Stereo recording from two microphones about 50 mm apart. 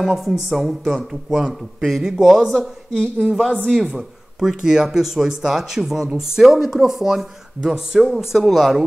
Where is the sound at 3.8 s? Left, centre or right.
Centre.